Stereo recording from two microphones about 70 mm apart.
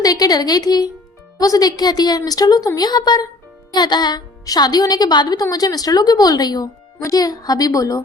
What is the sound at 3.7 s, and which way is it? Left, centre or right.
Speech, left.